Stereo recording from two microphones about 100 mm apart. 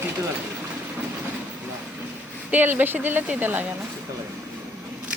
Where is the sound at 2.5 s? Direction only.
20° right (ahead or behind).